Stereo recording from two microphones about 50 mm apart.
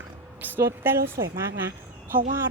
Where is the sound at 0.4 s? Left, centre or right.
Right.